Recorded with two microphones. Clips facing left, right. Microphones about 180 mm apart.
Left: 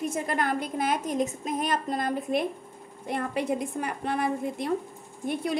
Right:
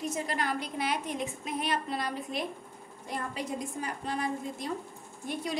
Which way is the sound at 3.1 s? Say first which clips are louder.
Left 7 dB; 60° left (ahead or behind).